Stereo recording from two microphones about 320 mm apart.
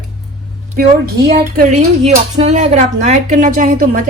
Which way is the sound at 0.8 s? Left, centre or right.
Right.